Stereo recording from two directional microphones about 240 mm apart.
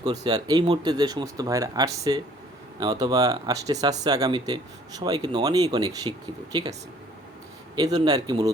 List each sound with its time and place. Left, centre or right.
0.3 s speech: centre
7.8 s speech: centre